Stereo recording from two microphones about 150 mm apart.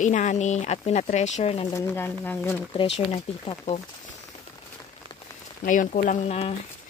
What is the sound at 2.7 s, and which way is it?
Speech, 45° left (ahead or behind).